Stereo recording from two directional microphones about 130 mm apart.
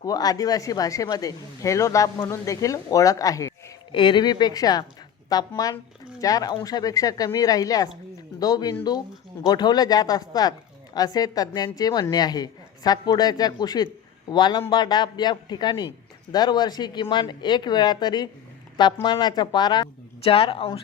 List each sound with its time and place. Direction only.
0.0 s speech: 30° left (ahead or behind)
3.9 s speech: 35° left (ahead or behind)
20.2 s speech: 45° left (ahead or behind)